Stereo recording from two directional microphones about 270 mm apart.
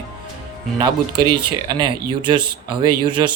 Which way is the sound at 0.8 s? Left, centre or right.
Centre.